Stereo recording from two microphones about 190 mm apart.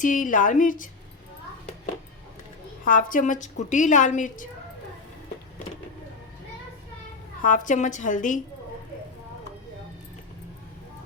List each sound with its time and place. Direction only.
0.0 s a woman's voice: 45° left (ahead or behind)
2.8 s a woman's voice: 45° left (ahead or behind)
7.4 s a woman's voice: 45° left (ahead or behind)